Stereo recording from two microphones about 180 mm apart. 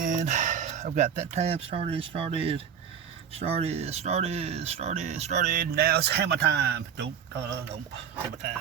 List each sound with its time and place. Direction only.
0.0 s speech: 40° right (ahead or behind)
5.7 s speech: 60° right (ahead or behind)